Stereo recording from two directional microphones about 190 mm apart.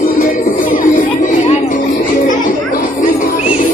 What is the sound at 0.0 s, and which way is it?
Music, 45° left (ahead or behind).